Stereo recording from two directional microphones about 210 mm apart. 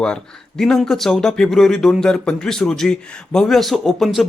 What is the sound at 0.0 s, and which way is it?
Speech, 5° left (ahead or behind).